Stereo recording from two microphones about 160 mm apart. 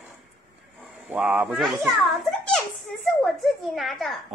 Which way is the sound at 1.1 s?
10° right (ahead or behind).